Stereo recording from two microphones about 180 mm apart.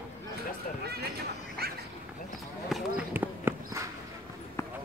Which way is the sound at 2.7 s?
5° right (ahead or behind).